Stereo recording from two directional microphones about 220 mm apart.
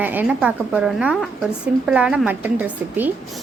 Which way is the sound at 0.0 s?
10° right (ahead or behind).